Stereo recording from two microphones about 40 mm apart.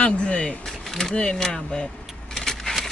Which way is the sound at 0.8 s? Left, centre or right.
Centre.